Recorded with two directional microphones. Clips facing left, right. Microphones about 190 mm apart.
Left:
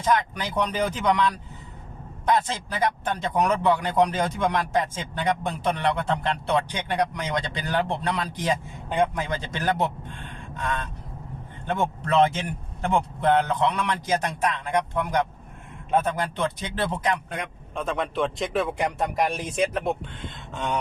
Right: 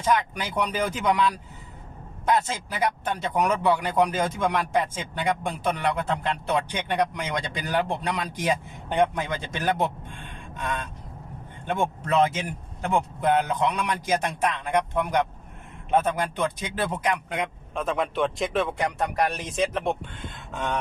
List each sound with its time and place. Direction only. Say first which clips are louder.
0.0 s speech: left 1 dB; 10° right (ahead or behind)
11.6 s speech: even; 15° right (ahead or behind)
17.7 s a man's voice: right 1 dB; centre (ahead or behind)